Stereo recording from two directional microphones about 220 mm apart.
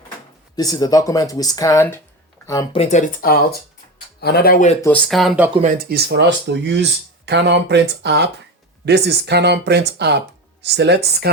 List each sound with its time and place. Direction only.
0.5 s speech: 15° left (ahead or behind)
2.7 s speech: 30° left (ahead or behind)
4.8 s speech: 5° left (ahead or behind)
5.7 s speech: 45° right (ahead or behind)